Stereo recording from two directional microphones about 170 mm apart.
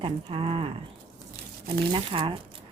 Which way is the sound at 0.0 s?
30° right (ahead or behind).